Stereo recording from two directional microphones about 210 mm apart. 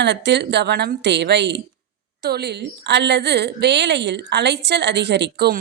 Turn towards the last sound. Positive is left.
turn(degrees=-50)  # may be behind; listen again after turning